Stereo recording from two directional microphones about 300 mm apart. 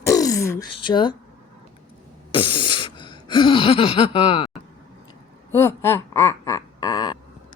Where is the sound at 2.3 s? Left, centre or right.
Centre.